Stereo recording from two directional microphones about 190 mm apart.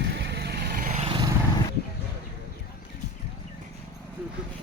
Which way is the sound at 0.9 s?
30° right (ahead or behind).